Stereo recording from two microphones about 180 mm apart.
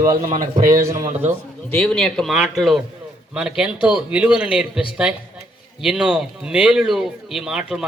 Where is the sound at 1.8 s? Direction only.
5° left (ahead or behind).